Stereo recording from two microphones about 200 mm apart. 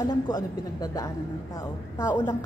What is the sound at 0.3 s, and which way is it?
A woman's voice, 20° left (ahead or behind).